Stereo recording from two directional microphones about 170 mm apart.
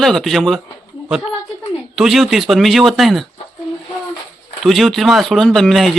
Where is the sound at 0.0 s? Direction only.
Centre (ahead or behind).